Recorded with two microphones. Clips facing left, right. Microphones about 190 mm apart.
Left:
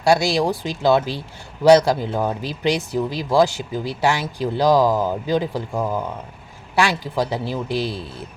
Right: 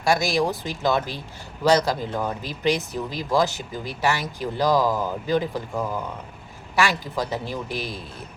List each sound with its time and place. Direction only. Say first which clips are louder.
0.0 s speech: left 4 dB; 15° left (ahead or behind)
7.7 s speech: left 7 dB; 15° right (ahead or behind)